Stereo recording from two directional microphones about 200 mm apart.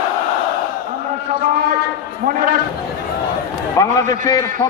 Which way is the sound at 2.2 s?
45° right (ahead or behind).